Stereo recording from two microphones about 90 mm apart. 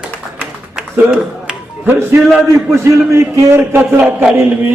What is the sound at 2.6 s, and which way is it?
Speech, 30° right (ahead or behind).